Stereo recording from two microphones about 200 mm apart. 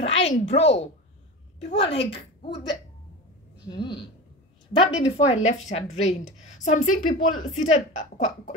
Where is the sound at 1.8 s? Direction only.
25° left (ahead or behind).